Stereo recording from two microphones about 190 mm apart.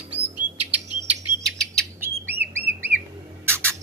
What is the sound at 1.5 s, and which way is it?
Bird, 5° left (ahead or behind).